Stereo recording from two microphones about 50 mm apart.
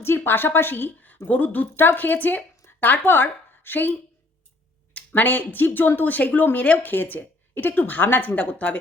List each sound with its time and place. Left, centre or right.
0.0 s a woman's voice: left
2.6 s a sound: left
3.0 s speech: left
4.9 s a woman's voice: left